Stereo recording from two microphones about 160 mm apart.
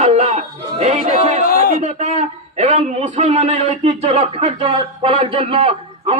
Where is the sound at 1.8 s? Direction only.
45° right (ahead or behind).